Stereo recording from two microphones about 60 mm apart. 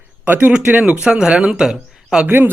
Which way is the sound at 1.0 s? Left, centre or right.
Centre.